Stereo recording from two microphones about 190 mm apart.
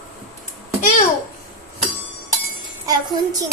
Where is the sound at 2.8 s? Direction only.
20° right (ahead or behind).